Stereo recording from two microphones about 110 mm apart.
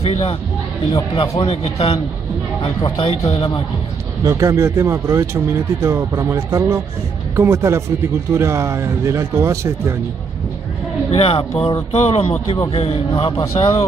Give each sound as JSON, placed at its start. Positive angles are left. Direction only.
{"t": 0.0, "sound": "speech", "side_deg": 70}
{"t": 1.4, "sound": "a man's voice", "side_deg": 60}
{"t": 4.2, "sound": "speech", "side_deg": -30}
{"t": 11.1, "sound": "a man's voice", "side_deg": 60}